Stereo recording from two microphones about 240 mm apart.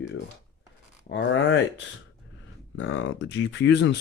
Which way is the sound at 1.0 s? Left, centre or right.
Left.